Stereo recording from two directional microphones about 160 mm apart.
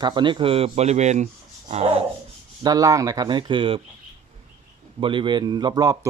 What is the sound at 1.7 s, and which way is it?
Rub, 40° right (ahead or behind).